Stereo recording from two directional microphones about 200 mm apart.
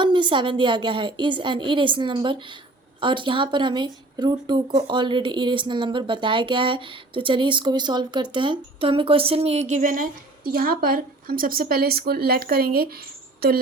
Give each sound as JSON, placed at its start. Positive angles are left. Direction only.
{"t": 0.0, "sound": "speech", "side_deg": -25}